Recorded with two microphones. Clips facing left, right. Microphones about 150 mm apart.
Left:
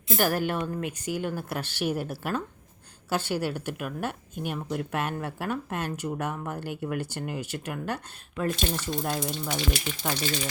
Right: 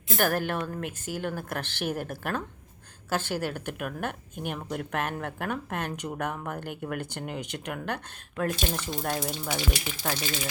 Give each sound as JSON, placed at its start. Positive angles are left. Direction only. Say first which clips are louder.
{"t": 0.1, "sound": "speech", "louder": "left 1 dB", "side_deg": 5}
{"t": 3.8, "sound": "speech", "louder": "left 1 dB", "side_deg": 0}